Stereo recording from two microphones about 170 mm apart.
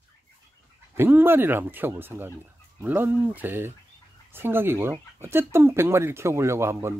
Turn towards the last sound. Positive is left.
turn(degrees=-15)  # may be behind; listen again after turning